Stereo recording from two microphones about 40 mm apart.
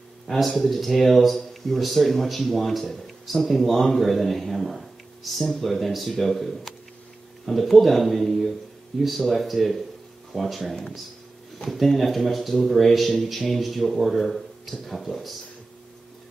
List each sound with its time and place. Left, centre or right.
0.3 s speech: centre